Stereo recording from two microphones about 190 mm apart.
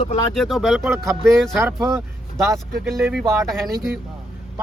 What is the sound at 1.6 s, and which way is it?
Speech, 15° right (ahead or behind).